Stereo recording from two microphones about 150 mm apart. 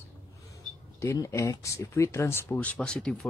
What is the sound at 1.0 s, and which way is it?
Speech, 20° left (ahead or behind).